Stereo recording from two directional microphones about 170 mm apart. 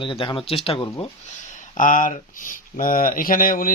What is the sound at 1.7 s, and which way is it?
Speech, 50° left (ahead or behind).